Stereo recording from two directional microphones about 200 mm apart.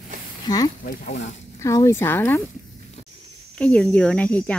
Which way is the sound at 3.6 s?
5° left (ahead or behind).